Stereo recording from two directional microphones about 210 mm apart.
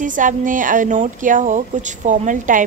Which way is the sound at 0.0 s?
40° right (ahead or behind).